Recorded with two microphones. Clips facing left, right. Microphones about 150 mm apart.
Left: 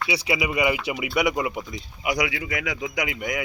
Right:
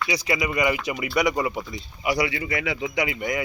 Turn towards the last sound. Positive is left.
turn(degrees=0)  # may be behind; listen again after turning